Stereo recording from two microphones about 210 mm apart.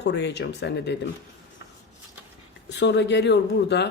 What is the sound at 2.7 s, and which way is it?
Speech, 55° left (ahead or behind).